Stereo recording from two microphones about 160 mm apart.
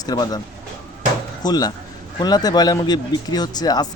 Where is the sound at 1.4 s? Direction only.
25° left (ahead or behind).